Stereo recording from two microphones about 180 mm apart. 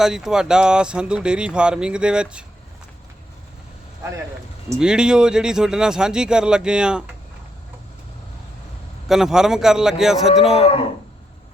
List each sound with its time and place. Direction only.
0.0 s speech: 5° right (ahead or behind)
4.8 s speech: 5° right (ahead or behind)
9.0 s speech: centre (ahead or behind)
10.5 s speech: 35° left (ahead or behind)